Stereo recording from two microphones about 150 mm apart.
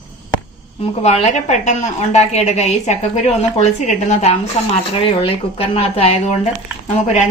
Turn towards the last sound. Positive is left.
turn(degrees=50)  # may be behind; listen again after turning